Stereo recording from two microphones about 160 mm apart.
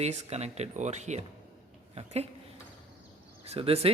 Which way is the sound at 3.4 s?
40° right (ahead or behind).